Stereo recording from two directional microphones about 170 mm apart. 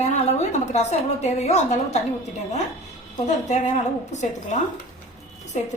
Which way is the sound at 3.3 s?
45° left (ahead or behind).